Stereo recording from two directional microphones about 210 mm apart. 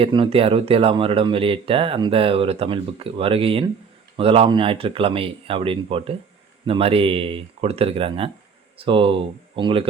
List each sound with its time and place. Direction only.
0.0 s speech: 25° right (ahead or behind)